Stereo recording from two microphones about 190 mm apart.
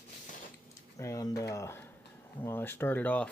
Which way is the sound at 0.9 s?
15° left (ahead or behind).